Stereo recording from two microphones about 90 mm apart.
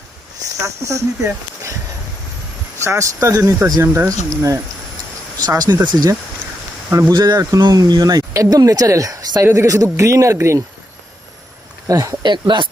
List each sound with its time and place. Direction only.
0.6 s speech: 35° right (ahead or behind)
2.8 s speech: 35° right (ahead or behind)
5.4 s speech: 50° right (ahead or behind)
7.1 s speech: 55° right (ahead or behind)
9.4 s speech: 30° right (ahead or behind)
11.9 s speech: 35° right (ahead or behind)
12.2 s speech: 60° right (ahead or behind)